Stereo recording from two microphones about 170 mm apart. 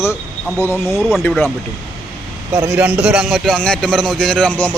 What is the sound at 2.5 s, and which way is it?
A man's voice, 15° right (ahead or behind).